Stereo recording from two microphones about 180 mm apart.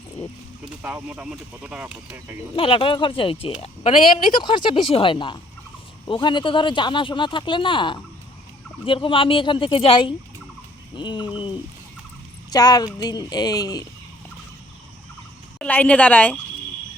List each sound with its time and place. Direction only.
0.7 s speech: 10° right (ahead or behind)
2.6 s speech: 30° left (ahead or behind)
12.5 s speech: 20° left (ahead or behind)
15.5 s a woman's voice: 5° left (ahead or behind)